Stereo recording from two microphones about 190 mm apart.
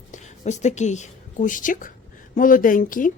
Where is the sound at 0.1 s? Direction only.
40° left (ahead or behind).